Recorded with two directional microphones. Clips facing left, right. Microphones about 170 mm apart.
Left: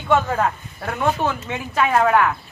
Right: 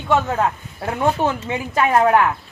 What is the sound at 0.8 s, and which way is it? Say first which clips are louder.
Speech: right 2 dB; 25° right (ahead or behind).